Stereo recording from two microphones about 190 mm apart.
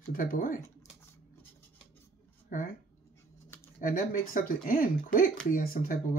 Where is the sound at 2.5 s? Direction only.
45° left (ahead or behind).